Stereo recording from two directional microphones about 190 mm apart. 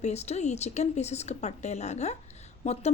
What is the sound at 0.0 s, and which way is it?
Speech, 35° left (ahead or behind).